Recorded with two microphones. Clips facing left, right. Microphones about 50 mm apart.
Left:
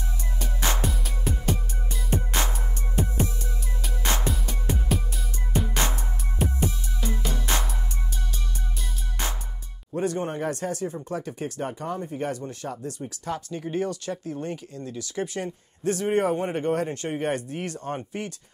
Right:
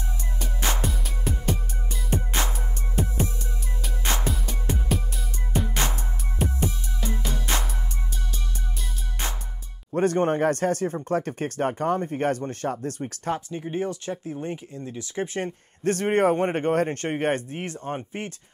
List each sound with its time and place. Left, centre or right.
0.4 s music: centre
9.9 s speech: right
13.0 s a man's voice: right
13.5 s speech: right
15.4 s a man's voice: right